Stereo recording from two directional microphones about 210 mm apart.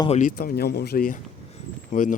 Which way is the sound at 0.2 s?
40° left (ahead or behind).